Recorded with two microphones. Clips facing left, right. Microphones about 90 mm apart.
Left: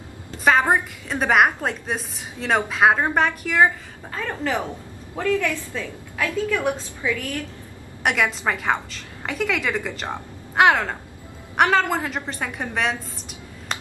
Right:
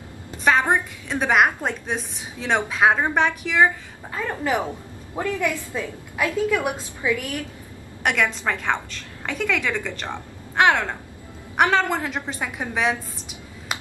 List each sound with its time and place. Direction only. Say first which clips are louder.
0.5 s a woman's voice: left 1 dB; 5° left (ahead or behind)
4.1 s a woman's voice: right 1 dB; 15° right (ahead or behind)
8.0 s a woman's voice: left 1 dB; centre (ahead or behind)